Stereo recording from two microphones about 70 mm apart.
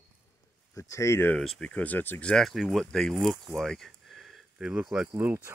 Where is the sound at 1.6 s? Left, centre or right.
Centre.